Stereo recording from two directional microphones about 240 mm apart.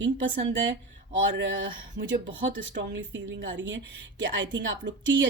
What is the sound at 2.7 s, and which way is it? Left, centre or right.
A woman's voice, right.